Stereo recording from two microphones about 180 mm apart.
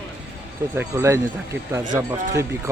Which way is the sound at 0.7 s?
15° right (ahead or behind).